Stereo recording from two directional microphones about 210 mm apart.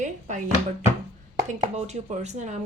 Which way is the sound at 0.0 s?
35° right (ahead or behind).